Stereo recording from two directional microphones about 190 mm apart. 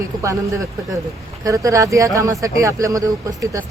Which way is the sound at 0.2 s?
15° right (ahead or behind).